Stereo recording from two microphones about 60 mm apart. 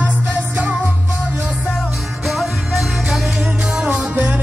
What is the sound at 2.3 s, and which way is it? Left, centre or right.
Music, centre.